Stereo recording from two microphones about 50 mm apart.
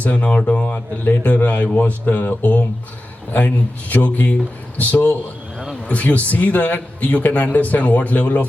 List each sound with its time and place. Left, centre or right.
0.0 s speech: left